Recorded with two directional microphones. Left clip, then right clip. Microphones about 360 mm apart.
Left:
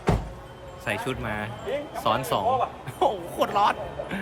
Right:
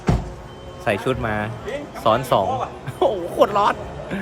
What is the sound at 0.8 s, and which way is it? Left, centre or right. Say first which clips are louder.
A man's voice: right 8 dB; centre.